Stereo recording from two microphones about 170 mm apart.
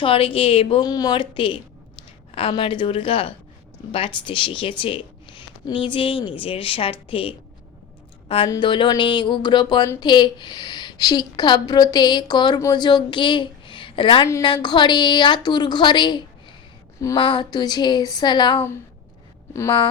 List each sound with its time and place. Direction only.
0.0 s a woman's voice: 30° left (ahead or behind)
8.4 s a woman's voice: 30° left (ahead or behind)